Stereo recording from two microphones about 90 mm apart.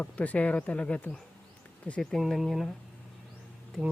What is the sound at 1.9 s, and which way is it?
Speech, 5° left (ahead or behind).